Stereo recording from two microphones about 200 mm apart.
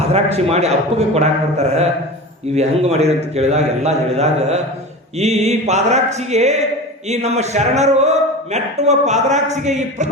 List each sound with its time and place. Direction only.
0.1 s a man's voice: 30° right (ahead or behind)